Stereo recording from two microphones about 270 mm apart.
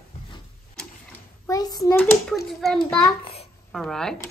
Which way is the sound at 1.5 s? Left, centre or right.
Centre.